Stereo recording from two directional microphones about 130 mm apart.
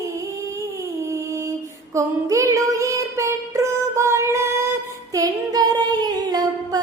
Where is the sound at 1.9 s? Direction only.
25° right (ahead or behind).